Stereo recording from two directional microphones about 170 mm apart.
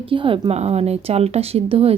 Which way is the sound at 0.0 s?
30° right (ahead or behind).